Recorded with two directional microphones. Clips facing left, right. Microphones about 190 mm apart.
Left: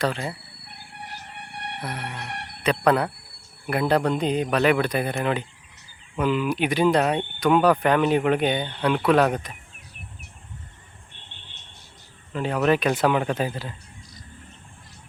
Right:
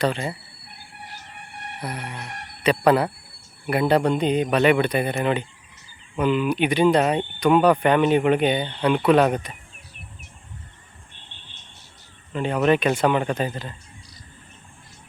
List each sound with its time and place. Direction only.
0.0 s speech: centre (ahead or behind)
1.5 s music: 70° left (ahead or behind)
1.8 s speech: centre (ahead or behind)
12.3 s speech: centre (ahead or behind)